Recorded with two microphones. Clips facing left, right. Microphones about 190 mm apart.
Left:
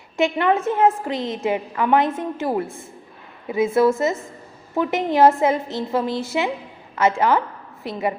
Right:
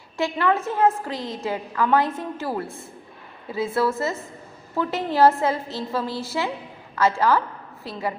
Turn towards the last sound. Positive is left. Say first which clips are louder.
# left 4 dB
turn(degrees=20)  # may be behind; listen again after turning